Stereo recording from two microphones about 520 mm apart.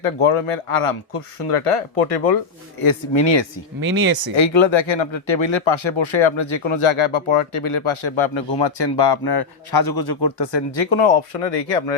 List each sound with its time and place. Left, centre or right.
0.0 s speech: left
2.8 s speech: left
3.8 s speech: right
4.4 s speech: left